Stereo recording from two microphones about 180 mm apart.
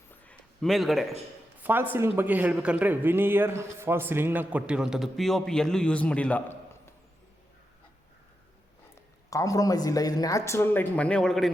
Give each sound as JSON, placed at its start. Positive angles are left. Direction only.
{"t": 0.3, "sound": "a sound", "side_deg": 0}
{"t": 1.6, "sound": "a man's voice", "side_deg": -10}
{"t": 9.3, "sound": "speech", "side_deg": 20}